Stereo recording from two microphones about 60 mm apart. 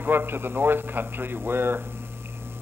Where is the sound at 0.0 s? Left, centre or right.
Right.